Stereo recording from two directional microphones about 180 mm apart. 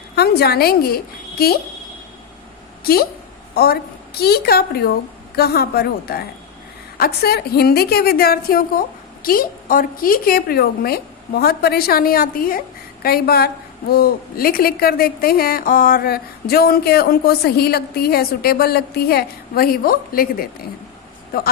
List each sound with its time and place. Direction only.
0.2 s a woman's voice: 60° left (ahead or behind)
2.8 s a woman's voice: 55° left (ahead or behind)